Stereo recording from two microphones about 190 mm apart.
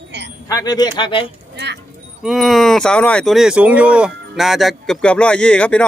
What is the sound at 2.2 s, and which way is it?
Speech, centre (ahead or behind).